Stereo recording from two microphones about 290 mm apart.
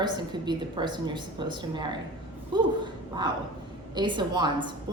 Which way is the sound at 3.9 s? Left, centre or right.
Centre.